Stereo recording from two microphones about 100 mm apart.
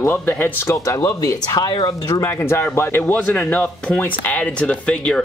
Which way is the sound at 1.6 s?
50° left (ahead or behind).